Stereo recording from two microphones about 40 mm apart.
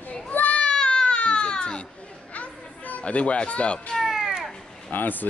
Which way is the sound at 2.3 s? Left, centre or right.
Left.